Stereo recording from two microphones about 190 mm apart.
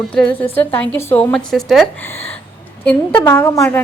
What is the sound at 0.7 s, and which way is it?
A woman's voice, 10° left (ahead or behind).